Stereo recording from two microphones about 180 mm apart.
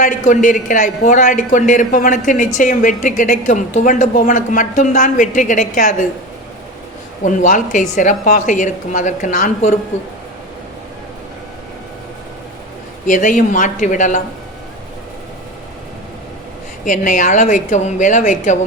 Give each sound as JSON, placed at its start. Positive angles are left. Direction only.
{"t": 0.0, "sound": "a woman's voice", "side_deg": 45}
{"t": 7.3, "sound": "a woman's voice", "side_deg": 45}
{"t": 13.1, "sound": "a woman's voice", "side_deg": 45}
{"t": 16.8, "sound": "a woman's voice", "side_deg": 45}